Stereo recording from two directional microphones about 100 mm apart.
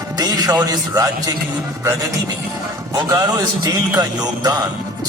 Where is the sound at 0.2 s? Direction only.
40° right (ahead or behind).